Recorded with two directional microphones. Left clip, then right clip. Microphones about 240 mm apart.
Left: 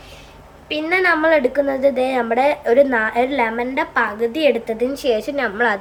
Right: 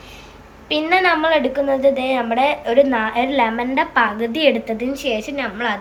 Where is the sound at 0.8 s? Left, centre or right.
Centre.